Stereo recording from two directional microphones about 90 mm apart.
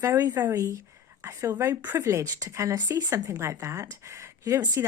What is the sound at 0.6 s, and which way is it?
Speech, 35° right (ahead or behind).